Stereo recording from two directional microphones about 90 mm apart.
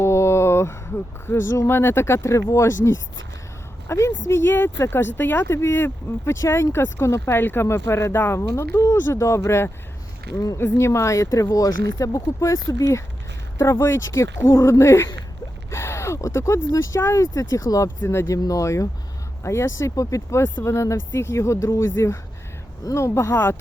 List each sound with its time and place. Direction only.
0.0 s speech: 30° left (ahead or behind)
17.8 s speech: 30° left (ahead or behind)